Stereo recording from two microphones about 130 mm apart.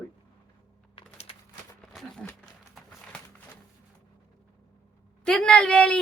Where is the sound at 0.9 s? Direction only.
50° left (ahead or behind).